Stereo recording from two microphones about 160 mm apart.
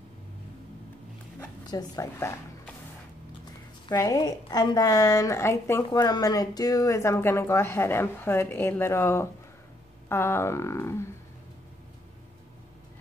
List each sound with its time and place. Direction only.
1.7 s speech: 25° left (ahead or behind)
2.1 s speech: 15° left (ahead or behind)
3.9 s a woman's voice: 20° left (ahead or behind)